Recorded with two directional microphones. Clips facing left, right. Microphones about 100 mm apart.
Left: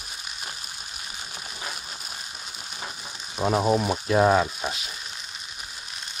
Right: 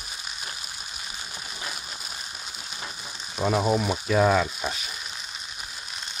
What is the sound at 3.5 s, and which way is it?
Speech, 15° left (ahead or behind).